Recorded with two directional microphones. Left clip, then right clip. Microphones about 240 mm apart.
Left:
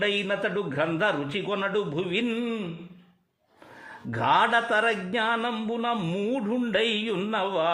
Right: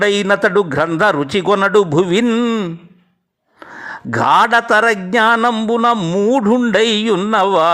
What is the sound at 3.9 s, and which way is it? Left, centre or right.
A man's voice, right.